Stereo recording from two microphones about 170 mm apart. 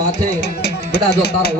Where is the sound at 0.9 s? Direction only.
70° left (ahead or behind).